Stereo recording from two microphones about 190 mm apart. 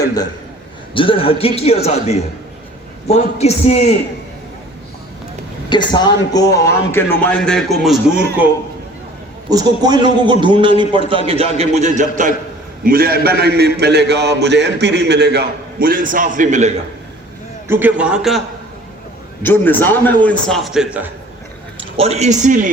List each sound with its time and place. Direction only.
0.9 s a man's voice: 30° left (ahead or behind)
5.6 s a man's voice: 25° left (ahead or behind); by 7.9 s centre (ahead or behind)
9.5 s a man's voice: 20° right (ahead or behind); by 16.7 s 40° right (ahead or behind)
17.7 s a man's voice: 10° right (ahead or behind)
19.4 s a man's voice: 10° left (ahead or behind); by 21.1 s 5° right (ahead or behind)
21.8 s speech: 30° right (ahead or behind)